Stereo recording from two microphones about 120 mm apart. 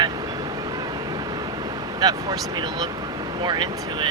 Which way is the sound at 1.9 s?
30° right (ahead or behind).